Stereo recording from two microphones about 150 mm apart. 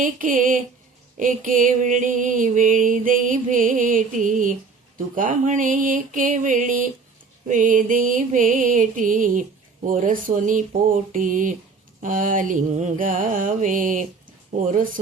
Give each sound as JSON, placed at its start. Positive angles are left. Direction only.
{"t": 0.0, "sound": "music", "side_deg": -60}